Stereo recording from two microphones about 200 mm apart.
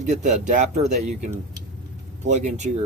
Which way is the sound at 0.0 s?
35° right (ahead or behind).